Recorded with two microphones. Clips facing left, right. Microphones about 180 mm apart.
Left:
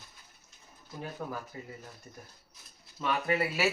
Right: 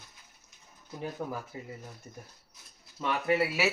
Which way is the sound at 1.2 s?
10° right (ahead or behind).